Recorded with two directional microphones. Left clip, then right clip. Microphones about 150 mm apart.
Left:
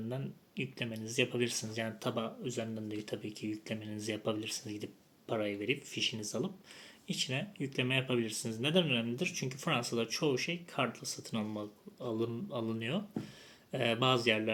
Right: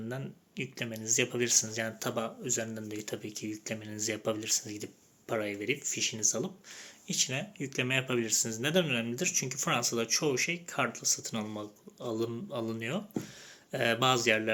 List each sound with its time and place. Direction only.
0.1 s speech: 10° left (ahead or behind)